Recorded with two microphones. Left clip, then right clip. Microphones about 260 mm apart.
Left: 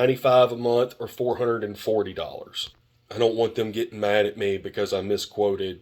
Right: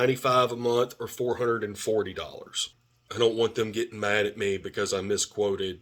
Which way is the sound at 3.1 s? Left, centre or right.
Centre.